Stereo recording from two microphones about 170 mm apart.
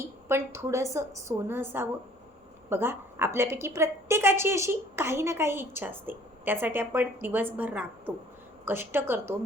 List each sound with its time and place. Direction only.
0.0 s a woman's voice: 15° right (ahead or behind)